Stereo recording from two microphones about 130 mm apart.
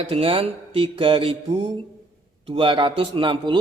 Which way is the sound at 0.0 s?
45° right (ahead or behind).